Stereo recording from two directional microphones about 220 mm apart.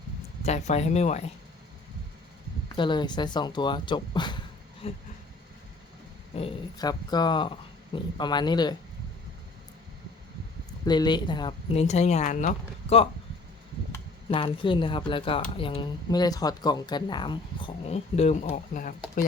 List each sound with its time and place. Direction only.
0.4 s speech: 30° left (ahead or behind)
2.7 s speech: 20° left (ahead or behind)
6.3 s speech: 20° left (ahead or behind)
10.8 s speech: 20° left (ahead or behind)
14.3 s speech: 25° left (ahead or behind); by 19.2 s 40° left (ahead or behind)